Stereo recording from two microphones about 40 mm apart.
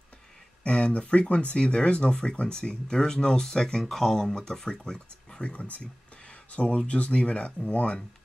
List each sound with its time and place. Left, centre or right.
0.7 s speech: left
5.4 s speech: left